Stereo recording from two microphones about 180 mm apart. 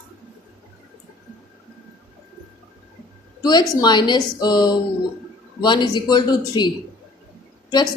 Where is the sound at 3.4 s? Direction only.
20° left (ahead or behind).